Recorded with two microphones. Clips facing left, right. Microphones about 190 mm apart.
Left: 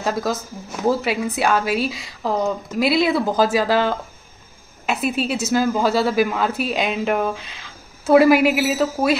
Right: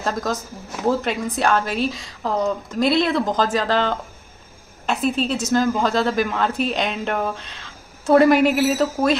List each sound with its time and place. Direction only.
0.0 s a woman's voice: 5° left (ahead or behind)